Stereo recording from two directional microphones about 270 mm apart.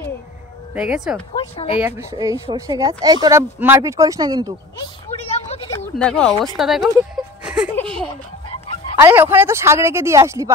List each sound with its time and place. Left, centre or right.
0.7 s speech: centre
1.3 s speech: centre
1.8 s speech: centre
5.5 s a sound: left
5.9 s speech: centre
6.9 s a sound: centre
9.0 s speech: centre